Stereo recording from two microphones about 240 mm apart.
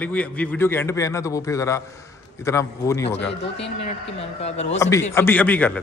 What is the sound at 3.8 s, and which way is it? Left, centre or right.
Speech, left.